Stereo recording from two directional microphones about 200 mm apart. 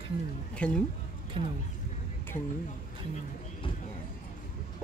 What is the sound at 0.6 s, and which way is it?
Speech, 5° left (ahead or behind).